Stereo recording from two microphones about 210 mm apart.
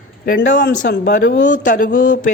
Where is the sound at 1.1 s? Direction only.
40° left (ahead or behind).